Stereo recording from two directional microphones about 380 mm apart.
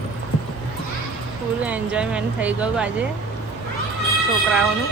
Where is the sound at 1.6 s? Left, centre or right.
Centre.